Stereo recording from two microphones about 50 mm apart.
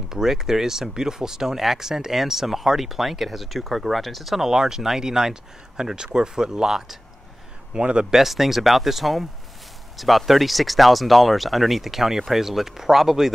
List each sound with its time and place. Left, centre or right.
0.1 s speech: centre
8.2 s speech: centre